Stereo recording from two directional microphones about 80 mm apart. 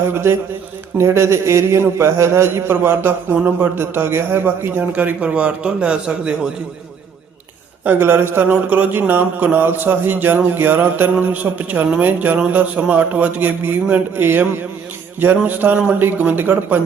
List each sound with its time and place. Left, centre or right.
0.1 s a man's voice: right; by 6.5 s centre
7.9 s speech: right